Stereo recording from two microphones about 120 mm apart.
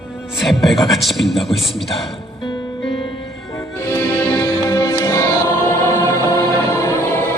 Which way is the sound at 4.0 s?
15° left (ahead or behind).